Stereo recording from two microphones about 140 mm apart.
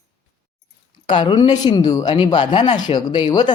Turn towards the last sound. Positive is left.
turn(degrees=35)  # may be behind; listen again after turning